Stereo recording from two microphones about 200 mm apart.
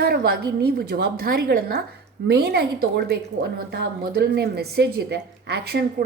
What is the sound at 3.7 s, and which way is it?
A woman's voice, 50° right (ahead or behind).